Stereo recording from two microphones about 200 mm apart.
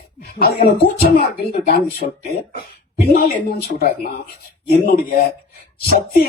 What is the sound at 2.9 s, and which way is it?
Speech, 50° left (ahead or behind).